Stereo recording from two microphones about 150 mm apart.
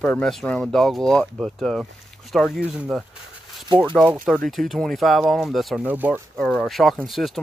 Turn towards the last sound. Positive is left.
turn(degrees=0)  # may be behind; listen again after turning